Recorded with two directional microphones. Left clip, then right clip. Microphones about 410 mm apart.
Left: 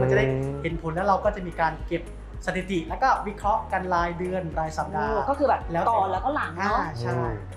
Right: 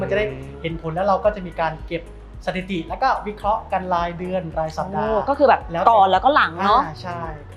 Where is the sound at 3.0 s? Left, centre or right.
Right.